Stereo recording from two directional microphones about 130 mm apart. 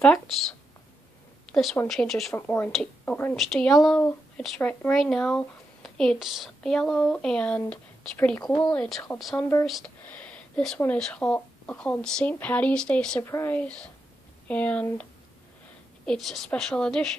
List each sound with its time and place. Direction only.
0.0 s speech: 5° left (ahead or behind)
1.5 s a woman's voice: centre (ahead or behind)
2.3 s speech: 15° left (ahead or behind)
3.3 s speech: 5° left (ahead or behind)
10.0 s a sound: 10° left (ahead or behind)
11.0 s speech: 5° left (ahead or behind)
13.2 s speech: 20° left (ahead or behind)
16.1 s speech: centre (ahead or behind)